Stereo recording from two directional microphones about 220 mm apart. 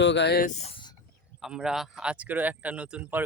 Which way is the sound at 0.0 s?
55° left (ahead or behind).